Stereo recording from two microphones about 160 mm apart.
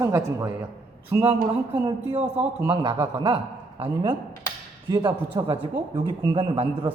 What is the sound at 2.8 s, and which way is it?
A woman's voice, 25° right (ahead or behind).